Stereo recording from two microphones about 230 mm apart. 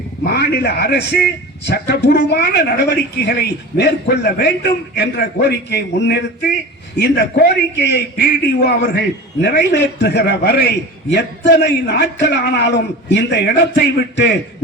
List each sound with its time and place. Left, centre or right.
0.3 s a man's voice: left